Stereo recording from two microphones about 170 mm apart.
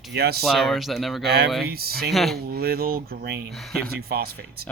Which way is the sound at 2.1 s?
Centre (ahead or behind).